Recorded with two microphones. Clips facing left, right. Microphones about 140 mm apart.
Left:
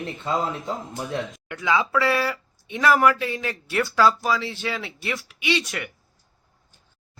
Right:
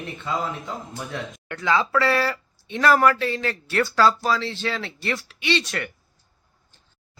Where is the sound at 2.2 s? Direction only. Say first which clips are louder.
Right 1 dB; 10° left (ahead or behind).